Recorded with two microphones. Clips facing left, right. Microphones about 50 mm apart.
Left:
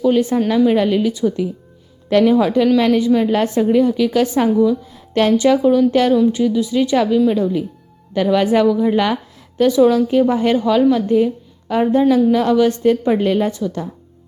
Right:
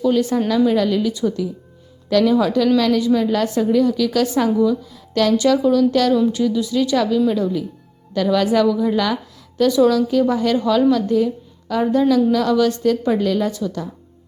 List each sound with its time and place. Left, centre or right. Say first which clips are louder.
0.0 s a woman's voice: left 2 dB; left